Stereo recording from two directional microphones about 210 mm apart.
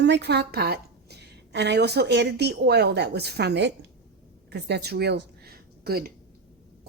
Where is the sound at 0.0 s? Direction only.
55° right (ahead or behind).